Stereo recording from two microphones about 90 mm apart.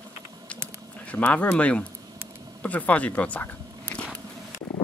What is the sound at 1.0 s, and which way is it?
Speech, 15° left (ahead or behind).